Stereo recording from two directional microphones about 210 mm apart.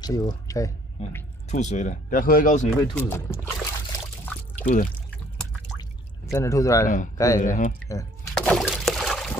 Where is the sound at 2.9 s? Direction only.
10° left (ahead or behind).